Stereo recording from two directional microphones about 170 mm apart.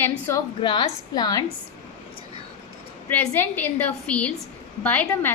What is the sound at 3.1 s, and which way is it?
A woman's voice, 10° left (ahead or behind).